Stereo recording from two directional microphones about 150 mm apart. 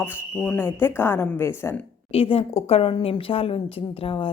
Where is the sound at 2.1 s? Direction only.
40° left (ahead or behind).